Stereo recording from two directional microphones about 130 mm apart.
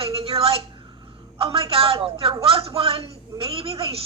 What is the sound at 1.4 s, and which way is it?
A woman's voice, 45° right (ahead or behind).